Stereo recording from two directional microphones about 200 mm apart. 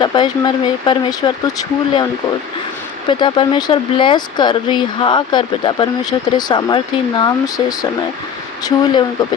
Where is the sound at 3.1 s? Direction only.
25° left (ahead or behind).